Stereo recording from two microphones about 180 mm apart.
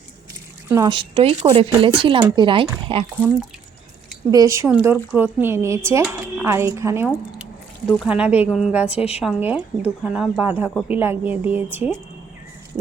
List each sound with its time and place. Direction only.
0.7 s speech: 25° right (ahead or behind)
4.3 s a woman's voice: 20° right (ahead or behind)
9.0 s a woman's voice: 35° left (ahead or behind)
9.2 s a woman's voice: 10° right (ahead or behind)